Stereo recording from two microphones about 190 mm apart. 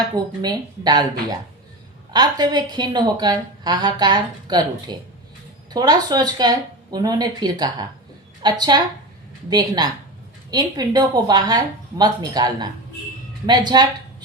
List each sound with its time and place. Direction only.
0.4 s a woman's voice: 20° right (ahead or behind)
2.1 s a woman's voice: 20° right (ahead or behind)